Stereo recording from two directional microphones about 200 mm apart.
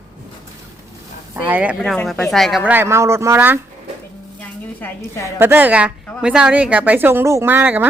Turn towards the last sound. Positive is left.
turn(degrees=-10)  # may be behind; listen again after turning